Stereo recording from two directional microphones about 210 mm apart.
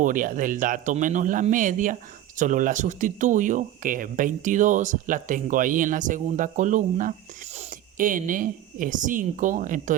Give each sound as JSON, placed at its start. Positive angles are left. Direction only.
{"t": 0.0, "sound": "speech", "side_deg": -40}